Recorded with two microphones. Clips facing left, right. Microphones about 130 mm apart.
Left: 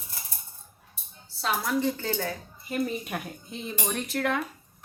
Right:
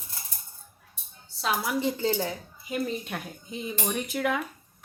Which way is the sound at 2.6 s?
Centre (ahead or behind).